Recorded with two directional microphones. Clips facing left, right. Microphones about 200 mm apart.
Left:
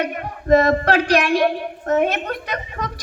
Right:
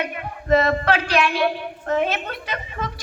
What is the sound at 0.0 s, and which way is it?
A woman's voice, 40° left (ahead or behind).